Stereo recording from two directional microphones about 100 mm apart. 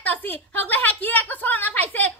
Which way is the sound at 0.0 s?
15° left (ahead or behind).